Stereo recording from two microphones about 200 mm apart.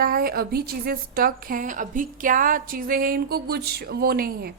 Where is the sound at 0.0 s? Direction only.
45° right (ahead or behind).